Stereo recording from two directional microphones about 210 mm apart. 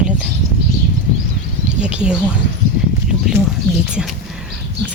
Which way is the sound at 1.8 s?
5° right (ahead or behind).